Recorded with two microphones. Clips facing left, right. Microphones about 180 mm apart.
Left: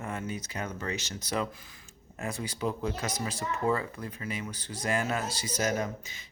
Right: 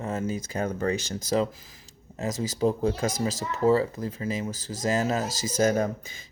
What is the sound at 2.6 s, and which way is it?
Speech, 30° right (ahead or behind).